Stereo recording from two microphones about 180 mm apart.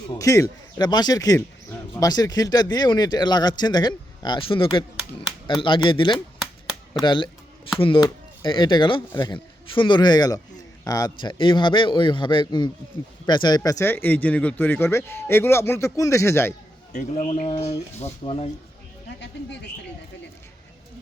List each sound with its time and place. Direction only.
0.1 s speech: 20° left (ahead or behind)
7.0 s a sound: 25° left (ahead or behind)
7.8 s a man's voice: 30° left (ahead or behind)
16.9 s speech: 40° left (ahead or behind)